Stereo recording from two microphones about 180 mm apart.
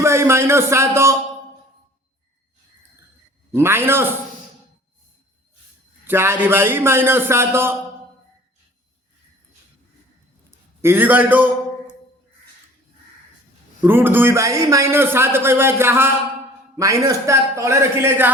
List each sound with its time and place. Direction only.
0.0 s a man's voice: 15° right (ahead or behind)
3.5 s a man's voice: 15° right (ahead or behind)
6.1 s a man's voice: 10° right (ahead or behind)
10.8 s a man's voice: 10° right (ahead or behind)
13.8 s a man's voice: 10° right (ahead or behind)